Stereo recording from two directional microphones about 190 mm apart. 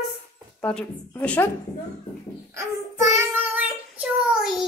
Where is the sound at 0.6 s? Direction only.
5° left (ahead or behind).